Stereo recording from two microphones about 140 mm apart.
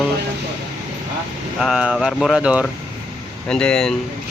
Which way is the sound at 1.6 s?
5° right (ahead or behind).